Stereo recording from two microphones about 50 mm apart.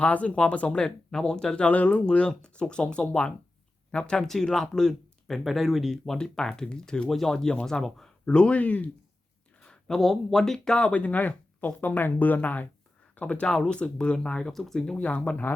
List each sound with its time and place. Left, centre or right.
0.0 s speech: left
1.6 s speech: left
4.3 s speech: centre
6.1 s speech: centre
8.2 s speech: left
9.6 s a sound: centre
9.9 s speech: centre
10.8 s speech: left
13.2 s speech: centre
14.5 s speech: centre
14.9 s speech: left